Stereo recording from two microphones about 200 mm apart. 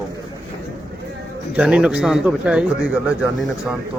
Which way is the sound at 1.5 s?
5° right (ahead or behind).